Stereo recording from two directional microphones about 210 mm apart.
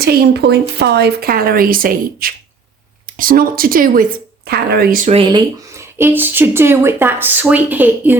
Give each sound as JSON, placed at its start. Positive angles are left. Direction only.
{"t": 0.0, "sound": "speech", "side_deg": -50}
{"t": 5.1, "sound": "speech", "side_deg": -20}